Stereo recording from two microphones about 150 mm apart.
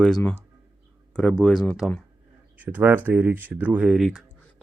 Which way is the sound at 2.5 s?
10° right (ahead or behind).